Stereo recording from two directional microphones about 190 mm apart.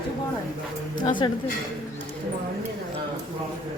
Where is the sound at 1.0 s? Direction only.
25° left (ahead or behind).